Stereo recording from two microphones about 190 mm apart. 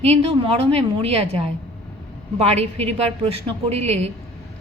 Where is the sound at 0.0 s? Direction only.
30° right (ahead or behind).